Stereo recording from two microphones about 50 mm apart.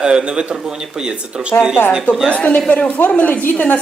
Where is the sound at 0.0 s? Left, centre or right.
Centre.